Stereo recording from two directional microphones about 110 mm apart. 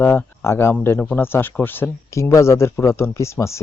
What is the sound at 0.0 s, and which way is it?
Speech, 20° left (ahead or behind).